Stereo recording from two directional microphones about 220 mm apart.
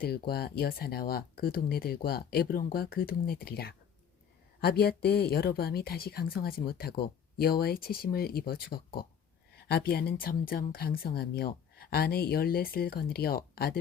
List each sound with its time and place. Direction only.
0.0 s a woman's voice: 45° left (ahead or behind)